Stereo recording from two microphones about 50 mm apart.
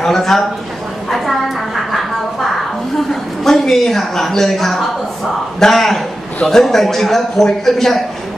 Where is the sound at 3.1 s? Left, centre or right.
Centre.